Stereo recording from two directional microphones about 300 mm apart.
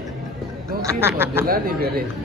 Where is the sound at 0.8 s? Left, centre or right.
Centre.